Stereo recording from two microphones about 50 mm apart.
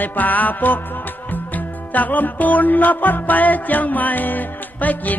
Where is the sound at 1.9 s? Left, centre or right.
Left.